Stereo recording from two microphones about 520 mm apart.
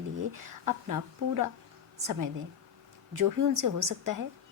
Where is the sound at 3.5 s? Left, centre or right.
Right.